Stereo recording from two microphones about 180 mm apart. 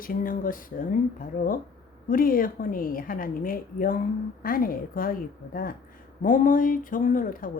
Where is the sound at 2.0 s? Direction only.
50° left (ahead or behind).